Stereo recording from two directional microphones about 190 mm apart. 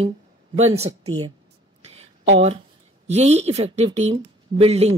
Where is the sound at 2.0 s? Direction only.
35° right (ahead or behind).